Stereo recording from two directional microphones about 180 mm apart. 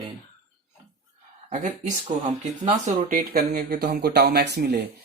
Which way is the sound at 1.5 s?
45° right (ahead or behind).